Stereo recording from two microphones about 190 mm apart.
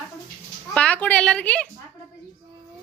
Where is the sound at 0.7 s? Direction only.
5° left (ahead or behind).